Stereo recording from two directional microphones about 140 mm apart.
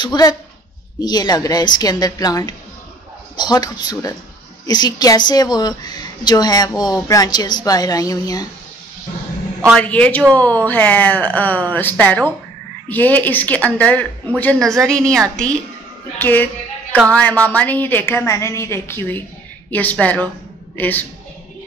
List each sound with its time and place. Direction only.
0.0 s a woman's voice: 30° left (ahead or behind)
9.8 s a woman's voice: 10° left (ahead or behind)
16.2 s a woman's voice: 15° left (ahead or behind)